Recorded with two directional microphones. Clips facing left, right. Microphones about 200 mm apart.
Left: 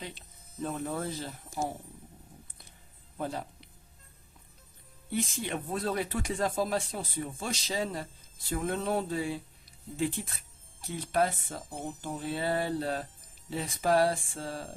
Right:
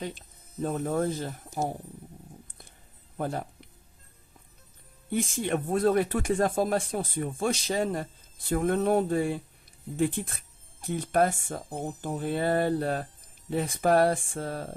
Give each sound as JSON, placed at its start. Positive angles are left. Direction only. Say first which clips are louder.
{"t": 0.6, "sound": "speech", "louder": "right 6 dB", "side_deg": -45}
{"t": 3.2, "sound": "speech", "louder": "right 4 dB", "side_deg": -50}
{"t": 5.1, "sound": "speech", "louder": "right 5 dB", "side_deg": -50}